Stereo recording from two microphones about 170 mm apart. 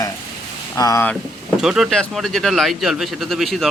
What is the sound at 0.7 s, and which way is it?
Speech, 20° left (ahead or behind).